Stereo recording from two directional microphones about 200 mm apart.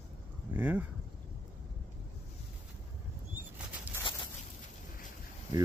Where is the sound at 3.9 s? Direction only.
10° right (ahead or behind).